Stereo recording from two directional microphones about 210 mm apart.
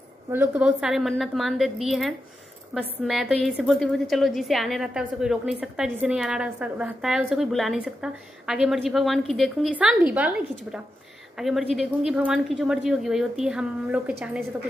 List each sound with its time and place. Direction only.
0.3 s a woman's voice: 10° right (ahead or behind)